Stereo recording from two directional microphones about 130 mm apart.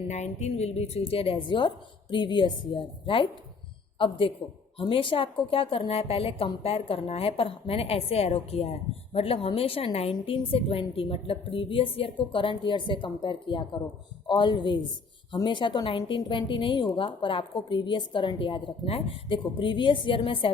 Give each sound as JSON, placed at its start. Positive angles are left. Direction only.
{"t": 0.1, "sound": "a woman's voice", "side_deg": 60}